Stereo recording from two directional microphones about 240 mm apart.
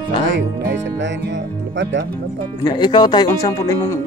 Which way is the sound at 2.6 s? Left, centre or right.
Centre.